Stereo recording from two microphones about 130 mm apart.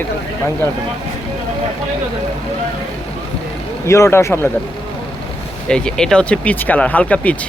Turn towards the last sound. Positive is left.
turn(degrees=10)  # may be behind; listen again after turning